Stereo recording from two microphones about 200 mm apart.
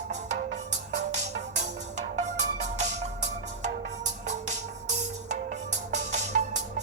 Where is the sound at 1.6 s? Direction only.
35° right (ahead or behind).